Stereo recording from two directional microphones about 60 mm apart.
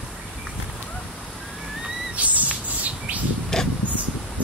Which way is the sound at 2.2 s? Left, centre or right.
Right.